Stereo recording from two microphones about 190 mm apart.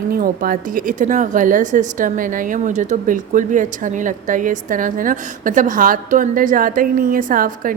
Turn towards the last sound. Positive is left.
turn(degrees=-45)  # may be behind; listen again after turning